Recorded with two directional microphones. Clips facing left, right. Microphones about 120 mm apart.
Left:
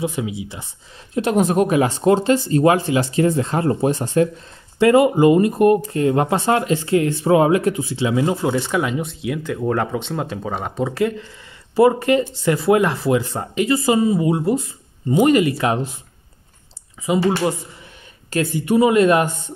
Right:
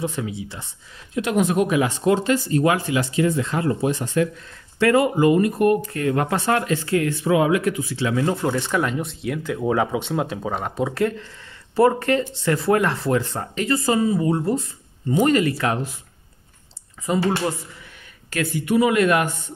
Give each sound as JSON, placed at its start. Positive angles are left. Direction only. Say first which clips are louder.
{"t": 0.0, "sound": "speech", "louder": "left 3 dB", "side_deg": 10}
{"t": 1.1, "sound": "speech", "louder": "left 3 dB", "side_deg": 35}
{"t": 4.7, "sound": "speech", "louder": "left 4 dB", "side_deg": 20}
{"t": 8.4, "sound": "speech", "louder": "left 2 dB", "side_deg": 5}
{"t": 17.0, "sound": "speech", "louder": "left 3 dB", "side_deg": 10}
{"t": 18.3, "sound": "speech", "louder": "left 3 dB", "side_deg": 25}